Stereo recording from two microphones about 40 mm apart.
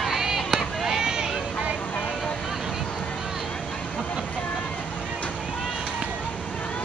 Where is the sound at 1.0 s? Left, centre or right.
Centre.